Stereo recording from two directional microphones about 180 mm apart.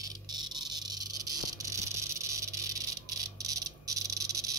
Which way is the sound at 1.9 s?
15° right (ahead or behind).